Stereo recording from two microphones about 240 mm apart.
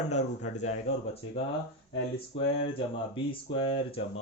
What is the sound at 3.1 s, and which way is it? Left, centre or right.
Speech, left.